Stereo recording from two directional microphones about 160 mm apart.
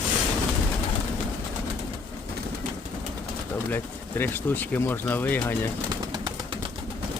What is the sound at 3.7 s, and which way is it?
Speech, 10° left (ahead or behind).